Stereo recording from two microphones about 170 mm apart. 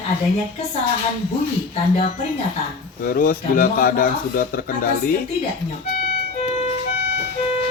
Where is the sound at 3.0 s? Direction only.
55° left (ahead or behind).